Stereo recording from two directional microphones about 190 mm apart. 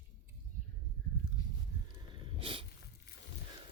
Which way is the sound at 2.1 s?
25° right (ahead or behind).